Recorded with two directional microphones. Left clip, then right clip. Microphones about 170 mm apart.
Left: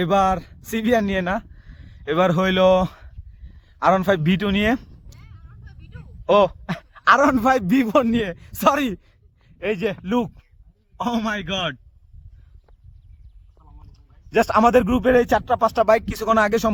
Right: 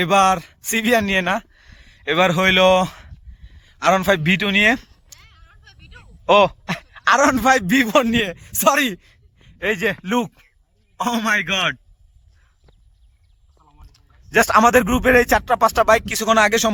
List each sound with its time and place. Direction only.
0.0 s speech: centre (ahead or behind)
4.2 s speech: 10° left (ahead or behind)
5.2 s a sound: 70° left (ahead or behind)
6.2 s a man's voice: centre (ahead or behind)
13.6 s speech: 10° right (ahead or behind)
16.0 s speech: 5° left (ahead or behind)